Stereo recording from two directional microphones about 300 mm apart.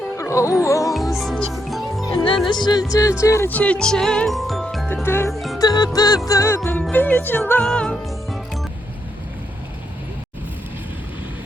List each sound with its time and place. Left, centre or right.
0.2 s music: centre
0.6 s speech: centre
1.1 s music: centre
2.1 s speech: centre
5.5 s music: centre